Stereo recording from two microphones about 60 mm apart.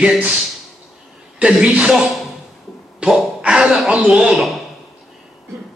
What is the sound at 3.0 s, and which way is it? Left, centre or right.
Gasp, centre.